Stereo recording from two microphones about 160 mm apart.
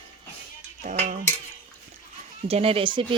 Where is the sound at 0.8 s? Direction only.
50° right (ahead or behind).